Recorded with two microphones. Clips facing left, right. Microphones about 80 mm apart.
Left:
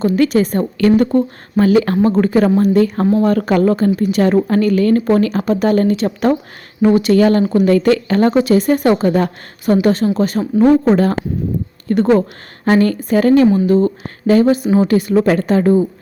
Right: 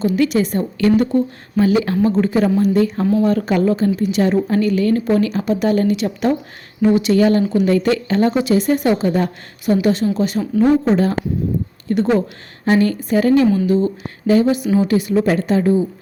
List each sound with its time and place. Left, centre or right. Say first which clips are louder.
0.0 s a woman's voice: left 3 dB; left
7.2 s a woman's voice: left 2 dB; left
9.8 s a woman's voice: left 3 dB; left
15.1 s a woman's voice: left 3 dB; left